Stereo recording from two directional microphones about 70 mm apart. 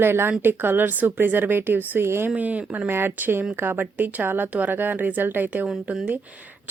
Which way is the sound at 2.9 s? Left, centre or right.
Right.